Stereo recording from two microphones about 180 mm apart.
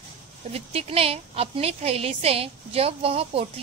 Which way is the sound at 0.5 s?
35° right (ahead or behind).